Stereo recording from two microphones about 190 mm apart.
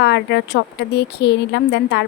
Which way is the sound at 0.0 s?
65° left (ahead or behind).